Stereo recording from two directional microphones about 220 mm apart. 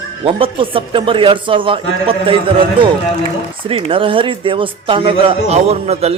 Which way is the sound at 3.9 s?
25° right (ahead or behind).